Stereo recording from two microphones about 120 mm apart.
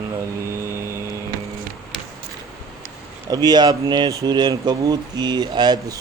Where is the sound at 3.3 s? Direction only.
35° right (ahead or behind).